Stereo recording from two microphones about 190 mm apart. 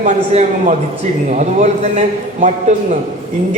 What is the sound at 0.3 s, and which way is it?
A man's voice, 40° right (ahead or behind).